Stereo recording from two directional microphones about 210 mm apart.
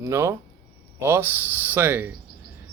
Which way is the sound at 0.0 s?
15° right (ahead or behind).